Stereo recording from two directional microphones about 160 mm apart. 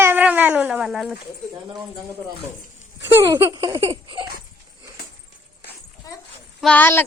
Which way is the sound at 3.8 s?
35° right (ahead or behind).